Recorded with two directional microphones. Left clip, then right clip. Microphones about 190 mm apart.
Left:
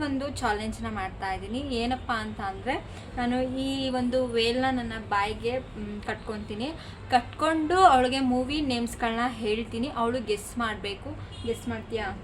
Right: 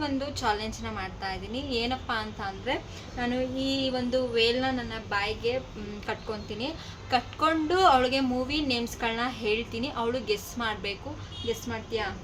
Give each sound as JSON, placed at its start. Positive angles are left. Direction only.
{"t": 0.0, "sound": "a woman's voice", "side_deg": 15}